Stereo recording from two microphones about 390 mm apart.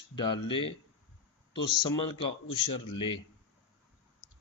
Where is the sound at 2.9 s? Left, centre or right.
Centre.